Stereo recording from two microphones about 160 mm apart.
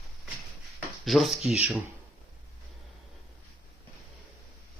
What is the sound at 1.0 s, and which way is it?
Speech, centre (ahead or behind).